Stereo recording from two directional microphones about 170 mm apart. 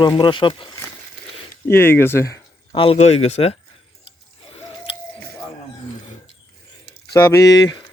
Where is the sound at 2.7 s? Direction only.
35° left (ahead or behind).